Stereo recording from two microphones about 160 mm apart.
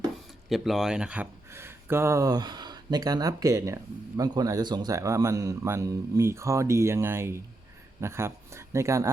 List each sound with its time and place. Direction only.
0.4 s speech: centre (ahead or behind); by 9.0 s 20° right (ahead or behind)